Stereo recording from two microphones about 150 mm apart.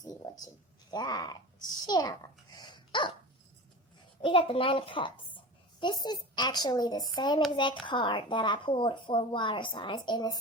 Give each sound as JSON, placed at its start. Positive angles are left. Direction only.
{"t": 0.0, "sound": "a sound", "side_deg": 25}
{"t": 0.9, "sound": "a child's voice", "side_deg": 25}
{"t": 4.2, "sound": "a child's voice", "side_deg": 35}